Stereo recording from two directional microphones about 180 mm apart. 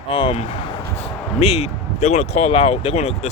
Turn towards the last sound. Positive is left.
turn(degrees=35)  # may be behind; listen again after turning